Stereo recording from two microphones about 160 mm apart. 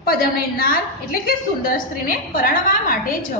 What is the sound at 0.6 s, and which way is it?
A woman's voice, 65° left (ahead or behind).